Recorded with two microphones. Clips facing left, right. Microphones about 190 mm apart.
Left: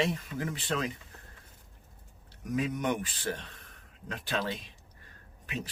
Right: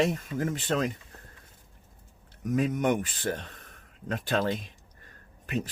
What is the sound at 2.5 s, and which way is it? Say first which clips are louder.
Speech: right 5 dB; 45° right (ahead or behind).